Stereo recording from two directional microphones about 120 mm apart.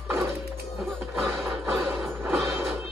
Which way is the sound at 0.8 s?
Centre (ahead or behind).